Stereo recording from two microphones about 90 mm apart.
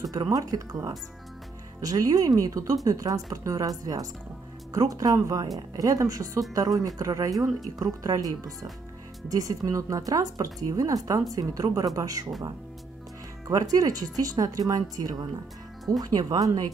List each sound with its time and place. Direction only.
0.0 s a woman's voice: 45° right (ahead or behind)
13.5 s speech: 40° right (ahead or behind)